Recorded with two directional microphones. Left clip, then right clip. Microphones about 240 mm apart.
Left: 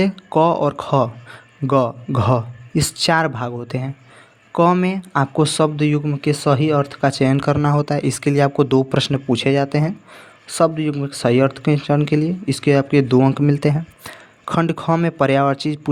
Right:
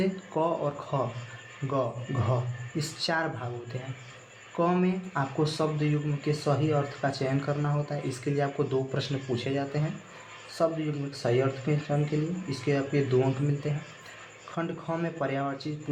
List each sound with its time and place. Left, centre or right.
0.0 s speech: left
11.1 s speech: left